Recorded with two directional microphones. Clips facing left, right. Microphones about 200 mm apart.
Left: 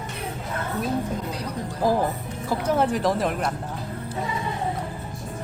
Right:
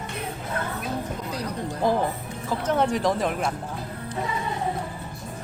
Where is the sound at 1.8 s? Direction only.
5° left (ahead or behind).